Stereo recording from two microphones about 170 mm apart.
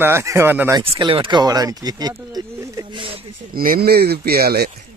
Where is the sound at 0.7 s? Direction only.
30° right (ahead or behind).